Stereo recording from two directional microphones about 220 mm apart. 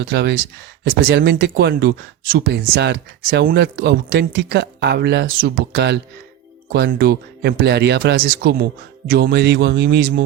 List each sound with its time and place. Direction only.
0.0 s speech: 50° right (ahead or behind)